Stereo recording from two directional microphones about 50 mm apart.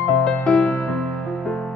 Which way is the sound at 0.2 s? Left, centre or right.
Centre.